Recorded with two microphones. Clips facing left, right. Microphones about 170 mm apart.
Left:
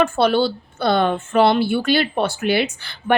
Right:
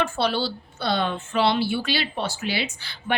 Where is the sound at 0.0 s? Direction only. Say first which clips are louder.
Left 7 dB; 55° left (ahead or behind).